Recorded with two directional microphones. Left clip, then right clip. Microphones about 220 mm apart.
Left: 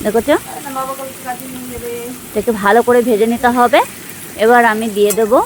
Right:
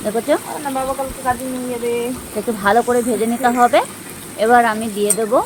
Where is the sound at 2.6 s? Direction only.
40° left (ahead or behind).